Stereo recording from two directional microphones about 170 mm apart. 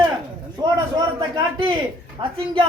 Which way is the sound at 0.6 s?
25° right (ahead or behind).